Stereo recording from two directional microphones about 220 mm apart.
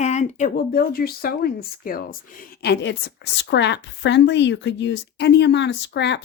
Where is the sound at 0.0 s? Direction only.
30° left (ahead or behind).